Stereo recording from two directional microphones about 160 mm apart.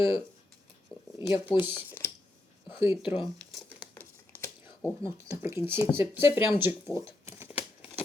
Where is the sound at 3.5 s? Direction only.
5° right (ahead or behind).